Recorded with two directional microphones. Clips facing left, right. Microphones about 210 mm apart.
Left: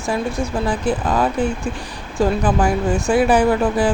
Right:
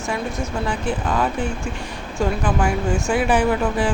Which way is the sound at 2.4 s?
35° left (ahead or behind).